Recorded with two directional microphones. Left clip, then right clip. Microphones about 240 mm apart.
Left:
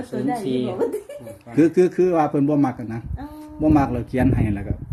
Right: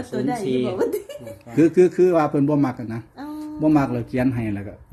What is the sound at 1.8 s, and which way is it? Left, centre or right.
A man's voice, centre.